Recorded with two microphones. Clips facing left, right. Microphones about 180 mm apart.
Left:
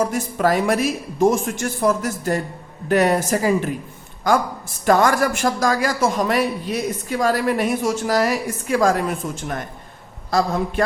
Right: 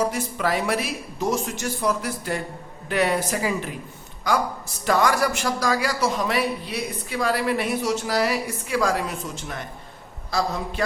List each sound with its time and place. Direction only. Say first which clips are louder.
0.0 s a man's voice: left 4 dB; 45° left (ahead or behind)